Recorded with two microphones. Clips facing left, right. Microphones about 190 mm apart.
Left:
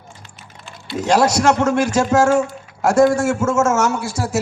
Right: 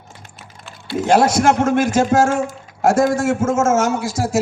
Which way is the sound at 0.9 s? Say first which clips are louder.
Right 1 dB; 55° right (ahead or behind).